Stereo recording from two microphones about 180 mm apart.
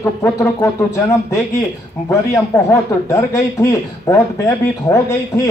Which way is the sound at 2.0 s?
15° left (ahead or behind).